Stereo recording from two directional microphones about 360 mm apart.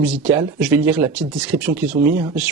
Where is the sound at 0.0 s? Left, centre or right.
Centre.